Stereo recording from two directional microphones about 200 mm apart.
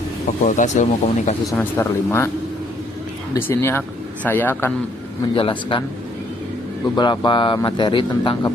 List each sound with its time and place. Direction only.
0.4 s speech: 40° left (ahead or behind)
1.5 s speech: 10° left (ahead or behind)
3.3 s speech: 10° left (ahead or behind)
5.3 s speech: 25° left (ahead or behind)
6.9 s speech: 20° left (ahead or behind)